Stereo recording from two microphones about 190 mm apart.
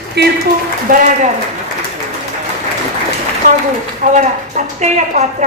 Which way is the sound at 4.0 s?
40° right (ahead or behind).